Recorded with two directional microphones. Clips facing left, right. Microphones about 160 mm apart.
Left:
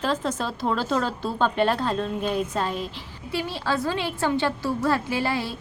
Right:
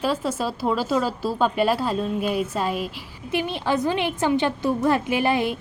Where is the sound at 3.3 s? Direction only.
20° right (ahead or behind).